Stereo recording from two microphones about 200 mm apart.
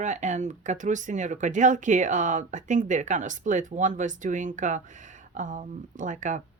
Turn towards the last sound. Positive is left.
turn(degrees=-40)  # may be behind; listen again after turning